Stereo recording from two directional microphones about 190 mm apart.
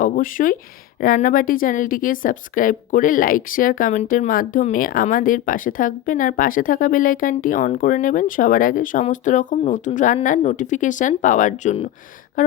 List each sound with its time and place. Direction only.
0.0 s a woman's voice: 45° left (ahead or behind)